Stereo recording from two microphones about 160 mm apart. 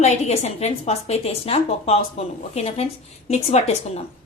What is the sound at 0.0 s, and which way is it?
A woman's voice, 45° left (ahead or behind).